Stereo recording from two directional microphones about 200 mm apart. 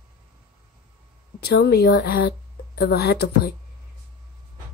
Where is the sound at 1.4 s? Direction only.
55° left (ahead or behind).